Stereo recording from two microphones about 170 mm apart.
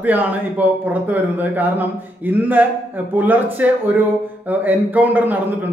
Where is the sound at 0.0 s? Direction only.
10° right (ahead or behind).